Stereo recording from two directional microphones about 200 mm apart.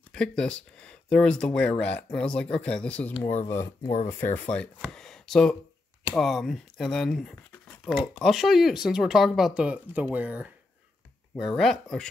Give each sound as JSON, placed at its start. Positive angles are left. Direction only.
{"t": 0.1, "sound": "speech", "side_deg": 5}
{"t": 3.2, "sound": "speech", "side_deg": 35}
{"t": 3.4, "sound": "speech", "side_deg": 15}
{"t": 4.9, "sound": "a sound", "side_deg": 5}
{"t": 6.1, "sound": "speech", "side_deg": 0}